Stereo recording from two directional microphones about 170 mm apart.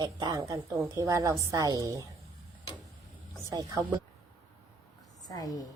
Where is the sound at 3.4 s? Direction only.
20° right (ahead or behind).